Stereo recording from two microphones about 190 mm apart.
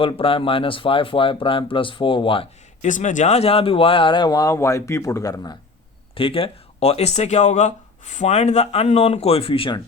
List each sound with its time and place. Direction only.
0.0 s speech: 30° left (ahead or behind)
2.8 s speech: 40° left (ahead or behind); by 5.5 s 20° left (ahead or behind)
6.1 s speech: 30° left (ahead or behind)